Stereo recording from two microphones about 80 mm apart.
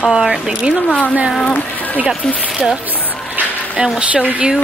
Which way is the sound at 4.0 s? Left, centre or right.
Centre.